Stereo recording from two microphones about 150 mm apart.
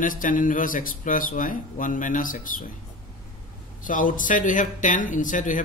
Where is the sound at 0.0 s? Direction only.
65° left (ahead or behind).